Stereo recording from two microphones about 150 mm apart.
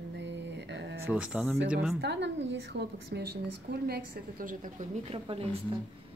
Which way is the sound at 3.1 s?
90° right.